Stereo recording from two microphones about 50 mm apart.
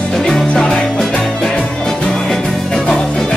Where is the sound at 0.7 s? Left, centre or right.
Centre.